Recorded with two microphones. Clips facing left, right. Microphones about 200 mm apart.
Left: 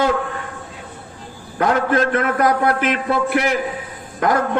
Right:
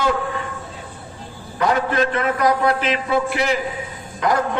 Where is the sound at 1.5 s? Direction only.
50° left (ahead or behind).